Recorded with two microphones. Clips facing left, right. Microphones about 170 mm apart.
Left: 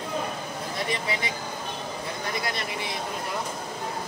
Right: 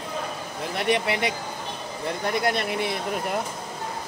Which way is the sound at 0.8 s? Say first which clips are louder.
Right 7 dB; 65° right (ahead or behind).